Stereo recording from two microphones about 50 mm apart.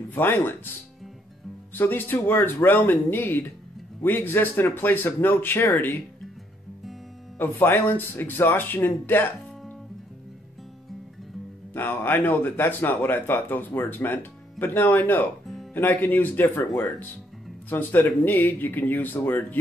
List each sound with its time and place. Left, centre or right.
0.1 s speech: left
1.7 s speech: left
7.3 s speech: left
11.7 s speech: left